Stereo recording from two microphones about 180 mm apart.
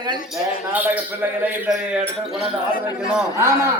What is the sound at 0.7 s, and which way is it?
A man's voice, 10° right (ahead or behind).